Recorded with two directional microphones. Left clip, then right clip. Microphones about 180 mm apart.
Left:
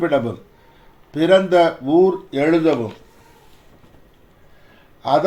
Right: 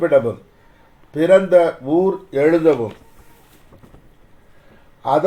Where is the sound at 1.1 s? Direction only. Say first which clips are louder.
Right 2 dB; 35° right (ahead or behind).